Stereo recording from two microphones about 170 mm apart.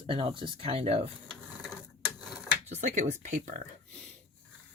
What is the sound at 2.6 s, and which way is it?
Speech, 45° right (ahead or behind).